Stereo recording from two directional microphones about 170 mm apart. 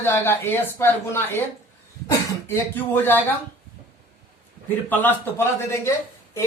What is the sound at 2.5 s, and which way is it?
Speech, 10° left (ahead or behind).